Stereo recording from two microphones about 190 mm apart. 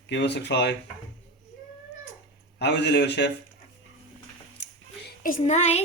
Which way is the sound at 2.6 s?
65° left (ahead or behind).